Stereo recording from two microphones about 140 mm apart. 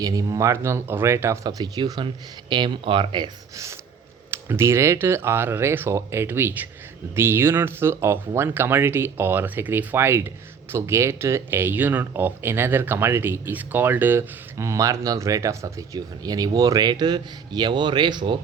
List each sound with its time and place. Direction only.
0.0 s speech: 25° right (ahead or behind)
4.3 s speech: 20° right (ahead or behind)